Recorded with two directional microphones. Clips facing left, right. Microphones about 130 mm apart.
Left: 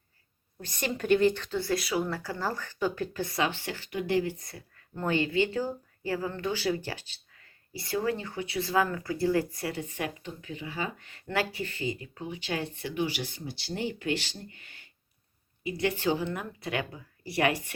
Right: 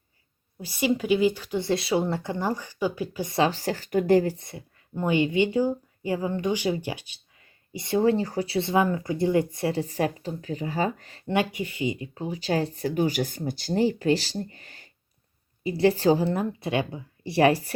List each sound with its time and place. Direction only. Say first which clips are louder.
0.6 s speech: right 7 dB; 5° right (ahead or behind)
1.5 s speech: right 4 dB; 25° right (ahead or behind)
3.2 s speech: right 10 dB; 30° right (ahead or behind)
4.4 s speech: right 5 dB; 25° right (ahead or behind); by 11.2 s 40° right (ahead or behind)
11.3 s speech: right 5 dB; 20° right (ahead or behind)
12.2 s speech: right 7 dB; 35° right (ahead or behind)